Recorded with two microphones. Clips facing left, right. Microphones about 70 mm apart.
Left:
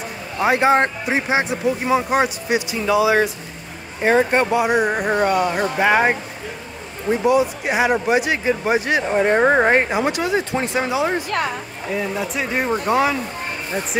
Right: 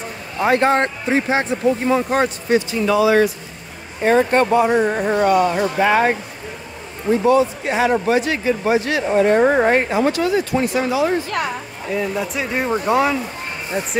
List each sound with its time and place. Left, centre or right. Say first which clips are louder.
0.4 s speech: even; centre
5.6 s speech: right 1 dB; centre
9.8 s speech: right 3 dB; centre
11.9 s speech: right 2 dB; centre